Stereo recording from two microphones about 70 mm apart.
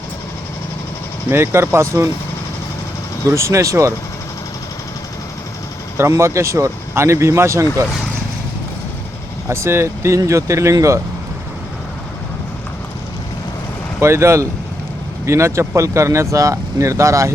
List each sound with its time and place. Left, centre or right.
1.3 s speech: right
3.2 s speech: right
6.0 s speech: right
9.5 s speech: right
14.0 s speech: right